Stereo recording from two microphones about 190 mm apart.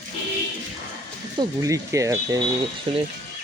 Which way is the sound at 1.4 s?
15° right (ahead or behind).